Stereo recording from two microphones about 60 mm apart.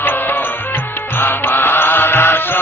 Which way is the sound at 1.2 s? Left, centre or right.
Left.